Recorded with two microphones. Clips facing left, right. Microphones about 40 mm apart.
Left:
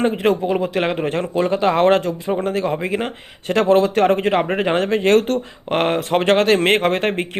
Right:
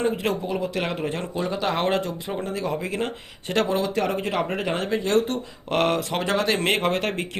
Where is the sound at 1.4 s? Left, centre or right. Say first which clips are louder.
Left 9 dB; left.